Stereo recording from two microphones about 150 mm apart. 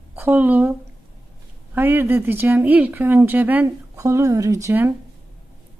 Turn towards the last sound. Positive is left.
turn(degrees=-15)  # may be behind; listen again after turning